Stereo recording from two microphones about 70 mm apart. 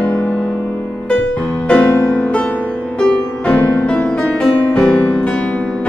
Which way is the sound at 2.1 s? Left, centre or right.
Centre.